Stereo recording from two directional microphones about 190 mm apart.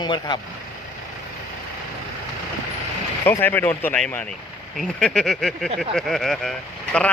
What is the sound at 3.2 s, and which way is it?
Speech, 10° left (ahead or behind).